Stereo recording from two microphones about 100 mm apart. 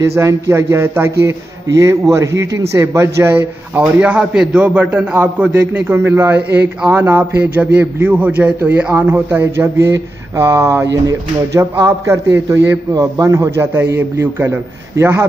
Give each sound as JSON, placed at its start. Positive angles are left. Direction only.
{"t": 0.0, "sound": "a man's voice", "side_deg": -30}